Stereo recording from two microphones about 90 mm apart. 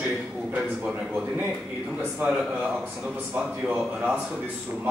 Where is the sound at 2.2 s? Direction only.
5° right (ahead or behind).